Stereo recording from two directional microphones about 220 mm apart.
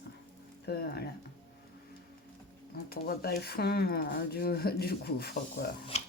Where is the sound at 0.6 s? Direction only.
45° left (ahead or behind).